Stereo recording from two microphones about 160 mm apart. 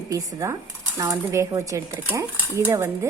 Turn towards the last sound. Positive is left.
turn(degrees=-15)  # may be behind; listen again after turning